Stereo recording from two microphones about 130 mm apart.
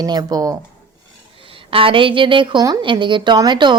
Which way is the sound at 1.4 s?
45° right (ahead or behind).